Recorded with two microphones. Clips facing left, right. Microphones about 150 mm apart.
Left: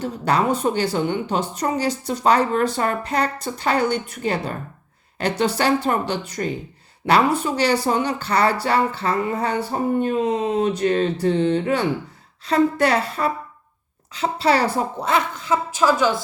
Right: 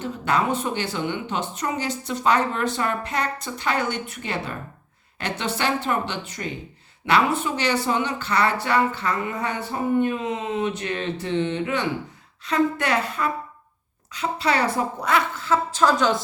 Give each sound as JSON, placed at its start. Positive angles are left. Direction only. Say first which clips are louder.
{"t": 0.0, "sound": "a woman's voice", "louder": "left 3 dB", "side_deg": 35}